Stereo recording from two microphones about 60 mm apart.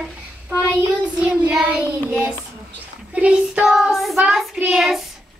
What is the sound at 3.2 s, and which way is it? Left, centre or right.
Child singing, centre.